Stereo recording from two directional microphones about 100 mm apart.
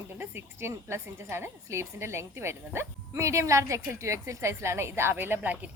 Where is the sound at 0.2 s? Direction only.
25° right (ahead or behind).